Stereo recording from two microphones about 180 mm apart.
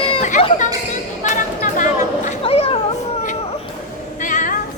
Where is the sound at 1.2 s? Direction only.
45° left (ahead or behind).